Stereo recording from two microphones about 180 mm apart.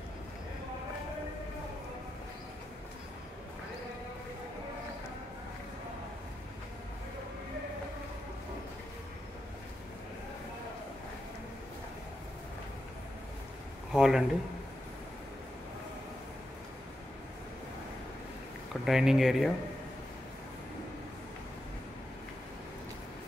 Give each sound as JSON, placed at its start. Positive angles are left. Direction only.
{"t": 13.9, "sound": "speech", "side_deg": -5}
{"t": 18.7, "sound": "speech", "side_deg": 0}